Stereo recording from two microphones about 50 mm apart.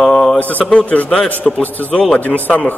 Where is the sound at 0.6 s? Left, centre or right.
Left.